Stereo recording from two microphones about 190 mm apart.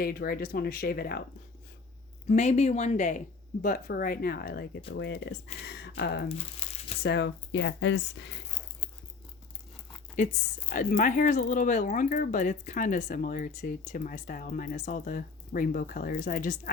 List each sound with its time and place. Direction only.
0.0 s speech: 55° left (ahead or behind)
2.2 s speech: 35° left (ahead or behind)
3.6 s speech: 50° left (ahead or behind)
6.2 s speech: 30° left (ahead or behind)
7.0 s speech: 65° left (ahead or behind)
10.2 s speech: 40° left (ahead or behind)